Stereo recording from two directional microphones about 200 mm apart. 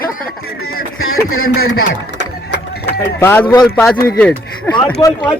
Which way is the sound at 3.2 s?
10° left (ahead or behind).